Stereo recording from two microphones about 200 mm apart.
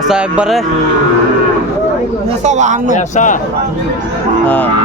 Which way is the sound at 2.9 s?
40° left (ahead or behind).